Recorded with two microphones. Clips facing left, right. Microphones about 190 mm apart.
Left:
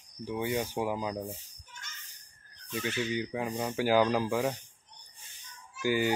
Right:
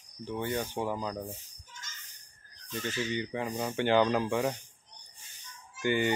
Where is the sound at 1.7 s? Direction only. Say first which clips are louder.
Even; 65° left (ahead or behind).